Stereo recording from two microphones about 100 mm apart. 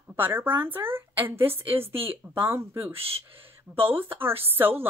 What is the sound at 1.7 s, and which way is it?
Speech, 70° right (ahead or behind).